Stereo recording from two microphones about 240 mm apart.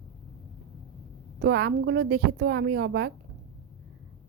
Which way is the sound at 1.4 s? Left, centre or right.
Right.